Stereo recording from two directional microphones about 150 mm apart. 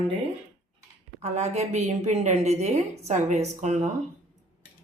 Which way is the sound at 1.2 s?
50° right (ahead or behind).